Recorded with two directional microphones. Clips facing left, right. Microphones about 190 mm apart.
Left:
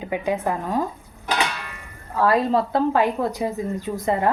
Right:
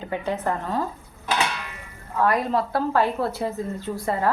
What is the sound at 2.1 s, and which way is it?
A woman's voice, 30° left (ahead or behind).